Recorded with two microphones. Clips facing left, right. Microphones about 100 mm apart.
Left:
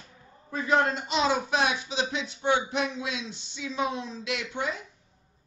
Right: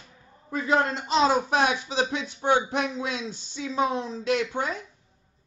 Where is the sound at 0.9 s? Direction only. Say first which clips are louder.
Right 4 dB; 35° right (ahead or behind).